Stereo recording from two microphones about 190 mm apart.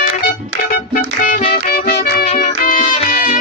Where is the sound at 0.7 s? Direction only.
45° left (ahead or behind).